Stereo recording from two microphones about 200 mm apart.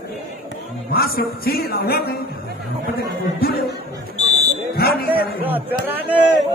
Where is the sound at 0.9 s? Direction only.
50° left (ahead or behind).